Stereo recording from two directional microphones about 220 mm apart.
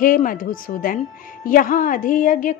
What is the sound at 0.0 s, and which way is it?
A woman's voice, 40° left (ahead or behind).